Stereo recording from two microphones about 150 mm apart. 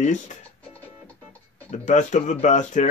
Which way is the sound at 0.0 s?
55° left (ahead or behind).